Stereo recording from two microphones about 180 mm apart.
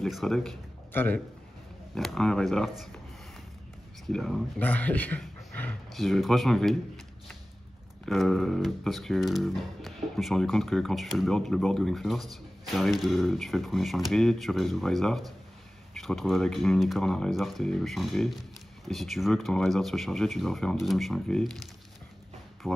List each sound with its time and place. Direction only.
0.0 s speech: centre (ahead or behind)
4.1 s speech: centre (ahead or behind)
8.0 s speech: centre (ahead or behind)